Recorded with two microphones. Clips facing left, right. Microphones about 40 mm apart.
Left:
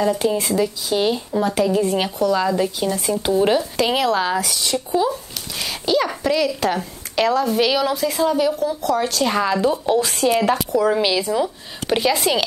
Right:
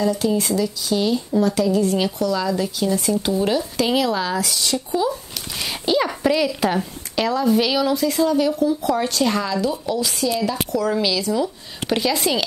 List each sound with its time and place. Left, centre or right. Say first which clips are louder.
0.0 s speech: left 1 dB; left
5.6 s a sound: left 1 dB; centre
6.2 s a woman's voice: even; centre
8.8 s speech: left 1 dB; centre
9.2 s speech: left 1 dB; centre
9.5 s speech: left 4 dB; left
10.7 s speech: left 3 dB; centre
11.9 s speech: left 2 dB; centre